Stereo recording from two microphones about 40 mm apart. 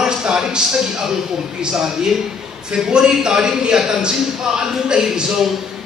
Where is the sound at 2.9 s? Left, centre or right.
Centre.